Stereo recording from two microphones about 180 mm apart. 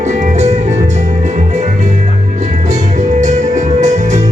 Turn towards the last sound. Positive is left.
turn(degrees=-40)  # may be behind; listen again after turning